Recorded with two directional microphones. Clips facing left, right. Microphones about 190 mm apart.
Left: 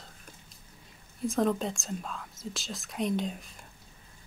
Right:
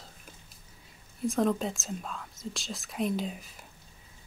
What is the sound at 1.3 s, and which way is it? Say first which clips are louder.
Speech: even; centre (ahead or behind).